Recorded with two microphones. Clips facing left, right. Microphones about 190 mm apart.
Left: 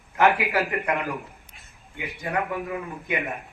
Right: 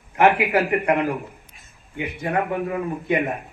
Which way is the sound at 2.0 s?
35° right (ahead or behind).